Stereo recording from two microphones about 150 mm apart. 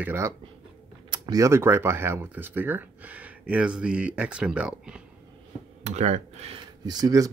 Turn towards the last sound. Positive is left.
turn(degrees=-25)  # may be behind; listen again after turning